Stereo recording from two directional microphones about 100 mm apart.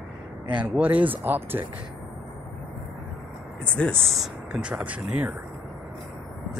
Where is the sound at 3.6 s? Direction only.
10° left (ahead or behind).